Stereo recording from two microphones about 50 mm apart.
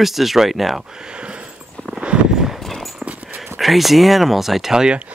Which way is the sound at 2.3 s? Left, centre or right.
Centre.